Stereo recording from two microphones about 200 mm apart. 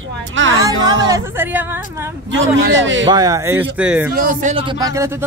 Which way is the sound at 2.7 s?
70° right (ahead or behind).